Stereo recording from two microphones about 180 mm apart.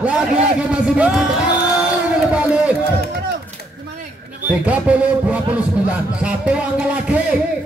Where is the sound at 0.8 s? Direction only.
5° right (ahead or behind).